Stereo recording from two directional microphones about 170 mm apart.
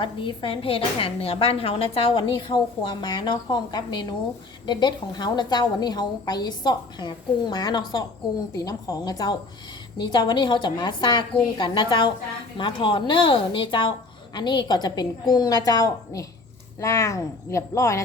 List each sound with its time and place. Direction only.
0.0 s a woman's voice: 30° left (ahead or behind)